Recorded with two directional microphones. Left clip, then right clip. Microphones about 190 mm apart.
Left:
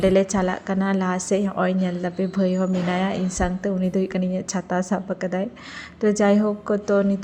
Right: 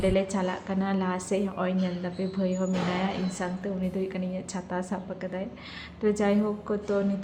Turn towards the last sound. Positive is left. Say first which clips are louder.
# left 8 dB
turn(degrees=30)  # may be behind; listen again after turning